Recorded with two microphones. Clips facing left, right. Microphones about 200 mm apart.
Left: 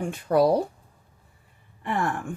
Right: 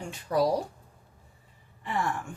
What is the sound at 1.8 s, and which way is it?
Speech, 55° left (ahead or behind).